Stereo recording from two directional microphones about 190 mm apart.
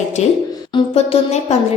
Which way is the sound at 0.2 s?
35° left (ahead or behind).